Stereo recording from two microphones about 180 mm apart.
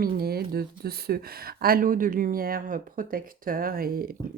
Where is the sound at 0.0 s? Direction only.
60° right (ahead or behind).